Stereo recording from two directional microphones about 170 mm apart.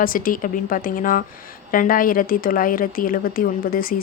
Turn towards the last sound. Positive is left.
turn(degrees=60)  # may be behind; listen again after turning